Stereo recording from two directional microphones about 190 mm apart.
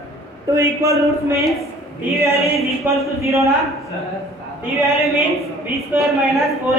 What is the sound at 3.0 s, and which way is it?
Speech, 15° right (ahead or behind).